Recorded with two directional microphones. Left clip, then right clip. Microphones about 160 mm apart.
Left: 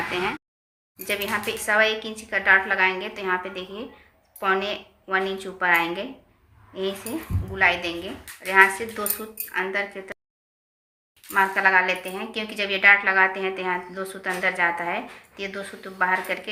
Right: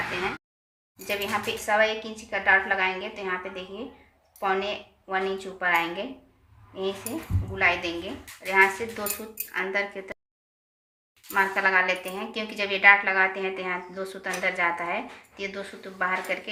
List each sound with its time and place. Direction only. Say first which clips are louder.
1.0 s a woman's voice: left 2 dB; 30° left (ahead or behind)
7.5 s speech: left 3 dB; 25° left (ahead or behind)
11.3 s speech: left 3 dB; 15° left (ahead or behind)